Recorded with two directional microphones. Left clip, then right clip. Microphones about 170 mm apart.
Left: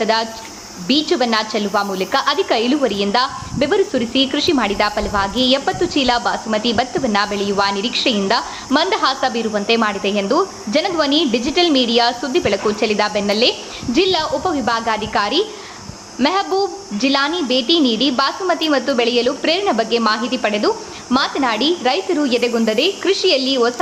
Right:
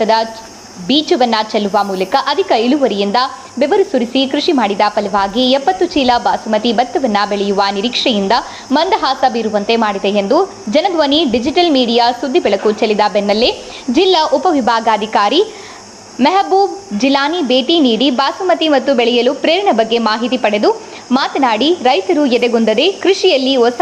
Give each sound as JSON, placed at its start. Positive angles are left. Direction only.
{"t": 0.0, "sound": "a woman's voice", "side_deg": -15}
{"t": 14.1, "sound": "a woman's voice", "side_deg": -35}